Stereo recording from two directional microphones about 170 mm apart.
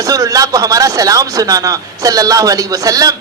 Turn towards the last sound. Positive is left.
turn(degrees=-20)  # may be behind; listen again after turning